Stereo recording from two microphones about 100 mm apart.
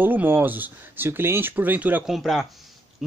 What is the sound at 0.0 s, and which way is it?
Speech, 20° right (ahead or behind).